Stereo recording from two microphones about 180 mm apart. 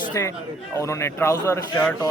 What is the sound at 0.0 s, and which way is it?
A man's voice, 15° left (ahead or behind).